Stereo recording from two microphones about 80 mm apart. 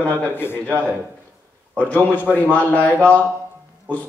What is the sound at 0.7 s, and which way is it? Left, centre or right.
Speech, right.